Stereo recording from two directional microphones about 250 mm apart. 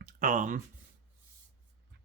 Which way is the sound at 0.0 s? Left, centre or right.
Right.